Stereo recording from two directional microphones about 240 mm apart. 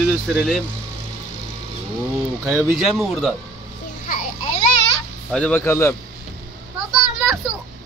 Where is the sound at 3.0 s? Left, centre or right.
Centre.